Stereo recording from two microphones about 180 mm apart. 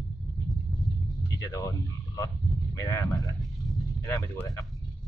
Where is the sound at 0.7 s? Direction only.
Centre (ahead or behind).